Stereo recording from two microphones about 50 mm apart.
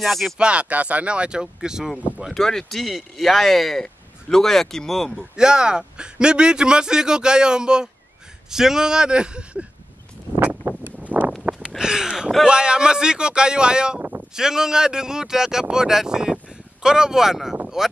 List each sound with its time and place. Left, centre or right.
0.0 s speech: centre
0.4 s speech: right
2.3 s speech: centre
5.3 s a man's voice: centre
10.4 s a sound: right
11.8 s a sound: centre
12.4 s a man's voice: centre